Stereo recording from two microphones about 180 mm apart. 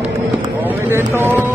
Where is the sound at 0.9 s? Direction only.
10° right (ahead or behind).